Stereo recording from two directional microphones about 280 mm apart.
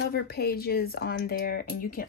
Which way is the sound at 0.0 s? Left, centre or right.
Left.